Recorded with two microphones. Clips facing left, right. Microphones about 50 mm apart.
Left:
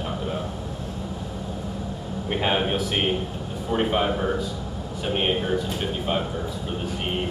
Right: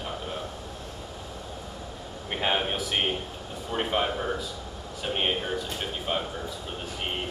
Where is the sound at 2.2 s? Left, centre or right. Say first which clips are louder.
Left 4 dB; centre.